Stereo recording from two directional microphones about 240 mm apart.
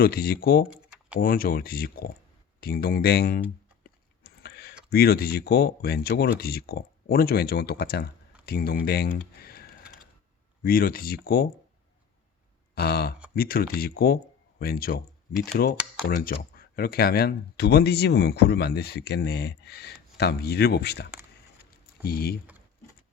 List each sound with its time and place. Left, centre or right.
0.0 s speech: left
0.7 s typing: centre
1.2 s speech: left
3.8 s a sound: left
4.9 s speech: left
12.7 s speech: left
15.3 s speech: centre
16.0 s speech: left